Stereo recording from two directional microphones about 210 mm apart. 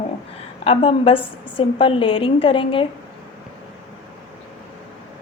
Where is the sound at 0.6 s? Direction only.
25° left (ahead or behind).